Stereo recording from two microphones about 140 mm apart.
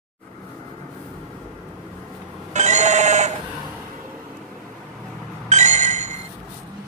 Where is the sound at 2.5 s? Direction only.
55° right (ahead or behind).